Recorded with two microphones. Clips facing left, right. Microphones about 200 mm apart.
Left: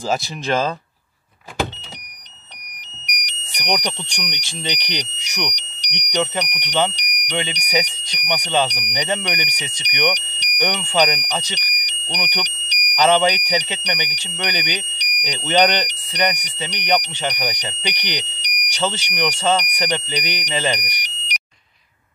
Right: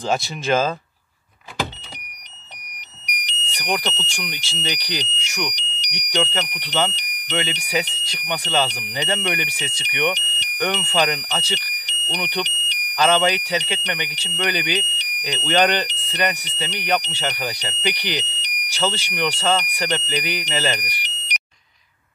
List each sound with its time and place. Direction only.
0.0 s speech: centre (ahead or behind)
3.3 s speech: 15° left (ahead or behind)